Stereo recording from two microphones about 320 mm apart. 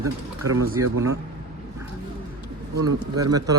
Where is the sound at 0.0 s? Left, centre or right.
Centre.